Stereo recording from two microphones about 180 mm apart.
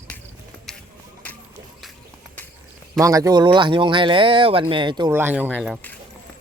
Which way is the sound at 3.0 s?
20° right (ahead or behind).